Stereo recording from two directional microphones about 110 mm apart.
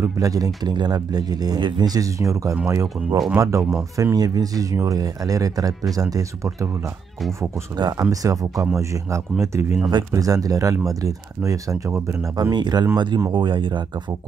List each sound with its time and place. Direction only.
0.0 s speech: 30° right (ahead or behind)
8.1 s speech: 30° right (ahead or behind)
9.8 s speech: 35° right (ahead or behind)
12.4 s speech: 40° right (ahead or behind)